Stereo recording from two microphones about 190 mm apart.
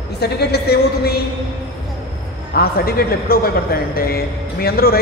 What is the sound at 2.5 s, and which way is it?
A man's voice, 50° left (ahead or behind).